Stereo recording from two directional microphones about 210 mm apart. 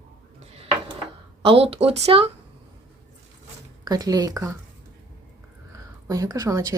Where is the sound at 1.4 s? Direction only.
25° right (ahead or behind).